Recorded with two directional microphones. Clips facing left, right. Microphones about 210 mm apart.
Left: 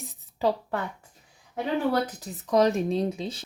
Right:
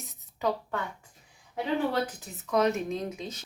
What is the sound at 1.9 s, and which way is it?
Speech, 35° left (ahead or behind).